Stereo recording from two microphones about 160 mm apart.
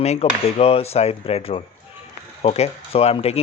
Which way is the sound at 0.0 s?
40° left (ahead or behind).